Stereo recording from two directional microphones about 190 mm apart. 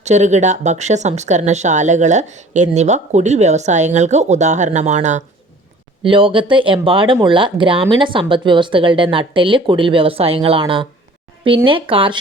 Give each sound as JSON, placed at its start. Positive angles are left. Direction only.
{"t": 0.0, "sound": "speech", "side_deg": -40}
{"t": 6.0, "sound": "speech", "side_deg": -25}